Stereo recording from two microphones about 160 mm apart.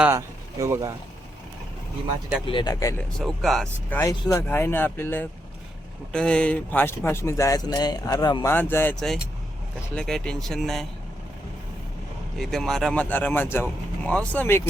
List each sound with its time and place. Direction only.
0.0 s speech: 15° right (ahead or behind)
2.5 s speech: 25° left (ahead or behind)
3.2 s speech: centre (ahead or behind); by 8.5 s 25° left (ahead or behind)
8.5 s speech: 15° left (ahead or behind)
12.4 s speech: centre (ahead or behind)